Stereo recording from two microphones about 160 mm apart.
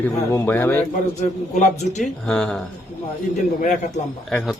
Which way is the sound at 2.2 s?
5° left (ahead or behind).